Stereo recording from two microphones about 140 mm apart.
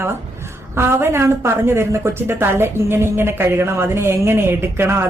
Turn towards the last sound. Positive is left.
turn(degrees=-20)  # may be behind; listen again after turning